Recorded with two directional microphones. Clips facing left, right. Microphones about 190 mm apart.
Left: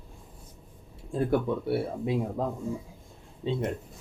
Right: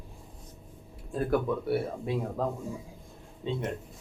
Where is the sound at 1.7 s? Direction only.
15° left (ahead or behind).